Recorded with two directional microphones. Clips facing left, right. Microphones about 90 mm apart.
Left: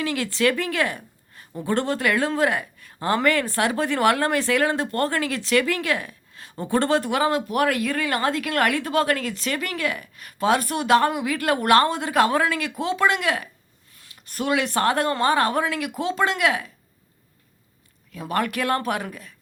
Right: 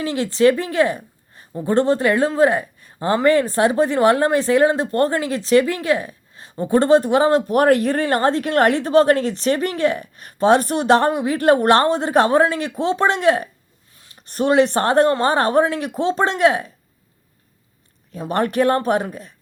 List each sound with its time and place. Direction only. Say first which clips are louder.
0.0 s a woman's voice: right 6 dB; 25° right (ahead or behind)
18.1 s speech: right 4 dB; 30° right (ahead or behind)